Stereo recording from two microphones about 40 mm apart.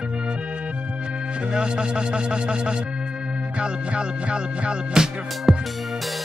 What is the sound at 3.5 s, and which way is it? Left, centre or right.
Music, right.